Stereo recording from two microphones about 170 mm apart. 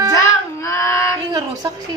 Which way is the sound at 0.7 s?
15° left (ahead or behind).